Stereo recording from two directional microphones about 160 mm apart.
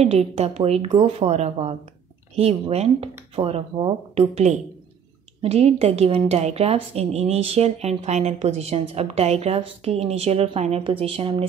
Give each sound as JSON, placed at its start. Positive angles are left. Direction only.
{"t": 0.0, "sound": "a woman's voice", "side_deg": -40}